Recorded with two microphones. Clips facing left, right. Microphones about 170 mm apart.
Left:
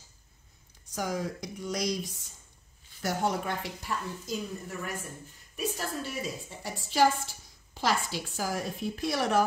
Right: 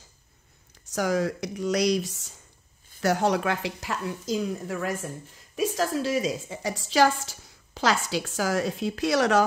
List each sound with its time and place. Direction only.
0.9 s a woman's voice: 75° right (ahead or behind)